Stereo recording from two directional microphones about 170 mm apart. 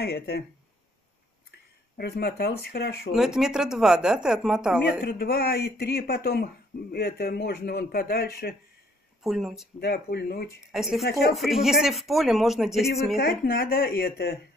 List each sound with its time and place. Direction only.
0.0 s speech: 70° left (ahead or behind)
2.0 s speech: 70° left (ahead or behind)
3.2 s a woman's voice: 5° right (ahead or behind)
5.0 s speech: 65° left (ahead or behind)
9.2 s a woman's voice: centre (ahead or behind)
9.8 s speech: 65° left (ahead or behind)
10.7 s a woman's voice: centre (ahead or behind)
13.2 s speech: 65° left (ahead or behind)